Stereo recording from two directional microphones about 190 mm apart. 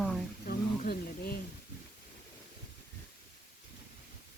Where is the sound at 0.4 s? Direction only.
45° left (ahead or behind).